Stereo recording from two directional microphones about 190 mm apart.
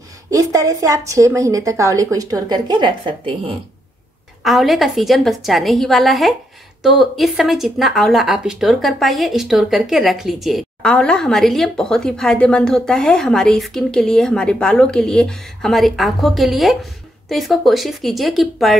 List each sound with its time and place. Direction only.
0.3 s a woman's voice: 15° right (ahead or behind)
4.4 s speech: centre (ahead or behind)